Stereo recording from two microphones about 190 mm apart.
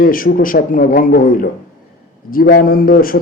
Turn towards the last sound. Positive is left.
turn(degrees=50)  # may be behind; listen again after turning